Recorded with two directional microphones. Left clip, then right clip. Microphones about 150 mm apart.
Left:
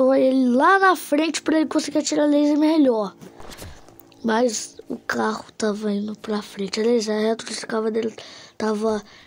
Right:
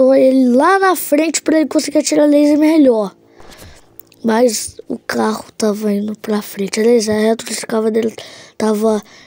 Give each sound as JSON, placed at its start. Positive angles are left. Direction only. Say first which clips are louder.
{"t": 0.0, "sound": "speech", "louder": "right 7 dB", "side_deg": -35}
{"t": 4.3, "sound": "a woman's voice", "louder": "right 7 dB", "side_deg": -45}